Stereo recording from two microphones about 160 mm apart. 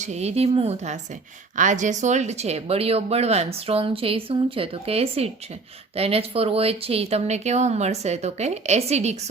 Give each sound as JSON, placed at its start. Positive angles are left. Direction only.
{"t": 0.0, "sound": "speech", "side_deg": -45}
{"t": 1.5, "sound": "speech", "side_deg": -50}